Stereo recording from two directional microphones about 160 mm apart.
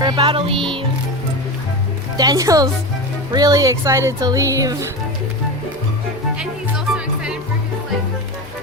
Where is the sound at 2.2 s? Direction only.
20° right (ahead or behind).